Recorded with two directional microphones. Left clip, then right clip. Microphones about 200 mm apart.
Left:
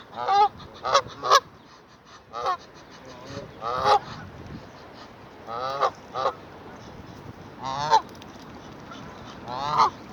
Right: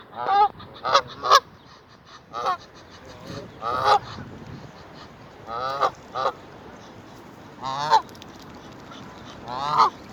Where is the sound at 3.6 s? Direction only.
5° left (ahead or behind).